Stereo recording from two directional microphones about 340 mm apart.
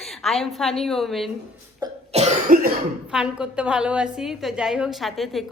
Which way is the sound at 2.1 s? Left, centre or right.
Centre.